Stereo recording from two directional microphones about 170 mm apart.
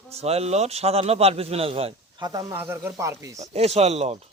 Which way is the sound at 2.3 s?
15° right (ahead or behind).